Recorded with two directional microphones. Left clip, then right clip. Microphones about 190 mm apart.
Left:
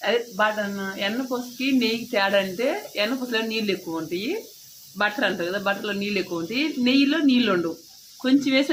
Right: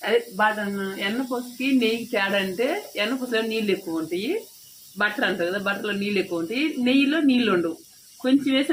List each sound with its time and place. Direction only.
0.0 s speech: 10° left (ahead or behind)